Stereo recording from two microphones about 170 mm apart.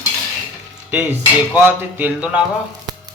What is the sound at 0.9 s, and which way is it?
Stir, 10° right (ahead or behind).